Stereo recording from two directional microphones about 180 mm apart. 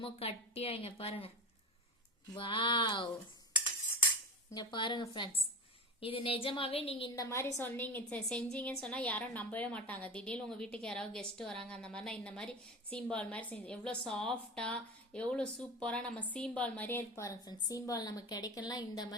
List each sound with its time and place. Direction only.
0.0 s a woman's voice: 35° left (ahead or behind)
2.3 s speech: 25° left (ahead or behind)
4.5 s a woman's voice: 25° left (ahead or behind)
7.2 s a woman's voice: 15° left (ahead or behind)